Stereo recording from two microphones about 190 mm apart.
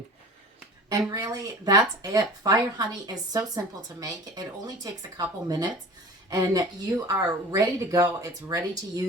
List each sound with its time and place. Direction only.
0.9 s a woman's voice: 20° right (ahead or behind)